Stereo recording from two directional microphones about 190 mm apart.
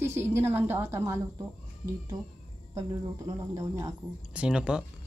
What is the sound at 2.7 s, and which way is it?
Speech, 20° right (ahead or behind).